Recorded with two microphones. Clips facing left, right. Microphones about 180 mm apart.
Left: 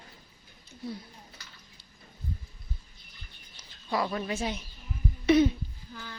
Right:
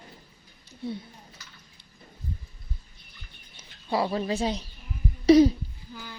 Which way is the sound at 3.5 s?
30° right (ahead or behind).